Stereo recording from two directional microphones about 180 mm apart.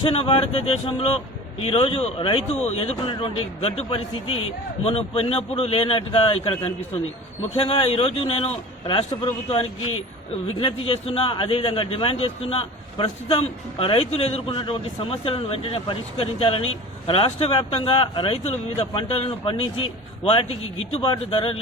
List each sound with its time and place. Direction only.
0.0 s speech: 30° left (ahead or behind)